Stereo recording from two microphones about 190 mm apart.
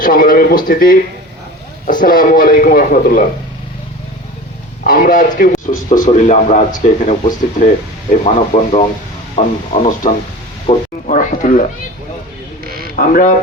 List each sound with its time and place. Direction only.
0.0 s a man's voice: 50° left (ahead or behind)
4.8 s a man's voice: 50° left (ahead or behind); by 10.8 s 30° left (ahead or behind)
11.0 s a man's voice: 40° left (ahead or behind)
13.0 s a man's voice: 45° left (ahead or behind)